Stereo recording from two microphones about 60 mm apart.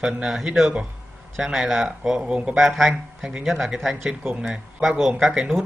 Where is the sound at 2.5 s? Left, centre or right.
Centre.